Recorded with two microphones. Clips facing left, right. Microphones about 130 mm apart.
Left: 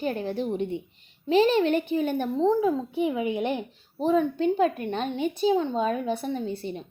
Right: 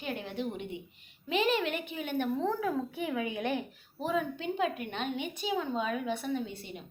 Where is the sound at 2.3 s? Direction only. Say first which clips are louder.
Left 8 dB; 25° left (ahead or behind).